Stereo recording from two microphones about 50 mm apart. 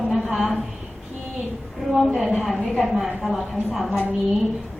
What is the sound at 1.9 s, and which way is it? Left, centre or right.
A woman's voice, centre.